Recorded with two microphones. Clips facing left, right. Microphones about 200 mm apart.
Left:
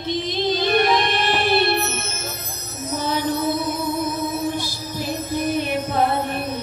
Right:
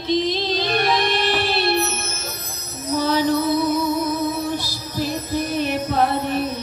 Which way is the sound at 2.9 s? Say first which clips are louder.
Right 4 dB; 50° left (ahead or behind).